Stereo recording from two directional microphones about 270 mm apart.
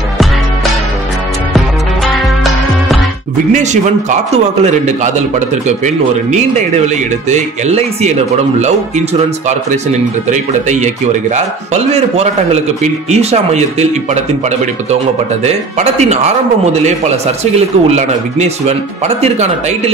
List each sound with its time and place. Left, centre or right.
2.1 s music: centre
3.5 s a man's voice: right
7.2 s a man's voice: right
10.3 s a man's voice: right
15.4 s a man's voice: right